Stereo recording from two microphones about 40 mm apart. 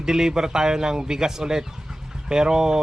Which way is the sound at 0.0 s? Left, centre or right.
Centre.